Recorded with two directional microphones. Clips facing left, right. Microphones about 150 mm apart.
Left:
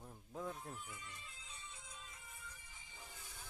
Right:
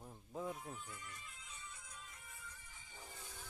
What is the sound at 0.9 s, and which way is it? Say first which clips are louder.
Music: right 1 dB; 20° left (ahead or behind).